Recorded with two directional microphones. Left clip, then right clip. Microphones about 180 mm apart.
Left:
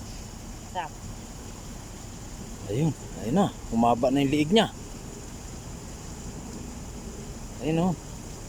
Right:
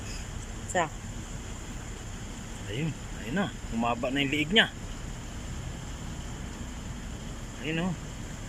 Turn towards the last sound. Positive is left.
turn(degrees=20)  # may be behind; listen again after turning